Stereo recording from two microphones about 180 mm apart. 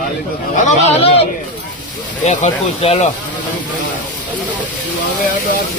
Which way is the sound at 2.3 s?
35° left (ahead or behind).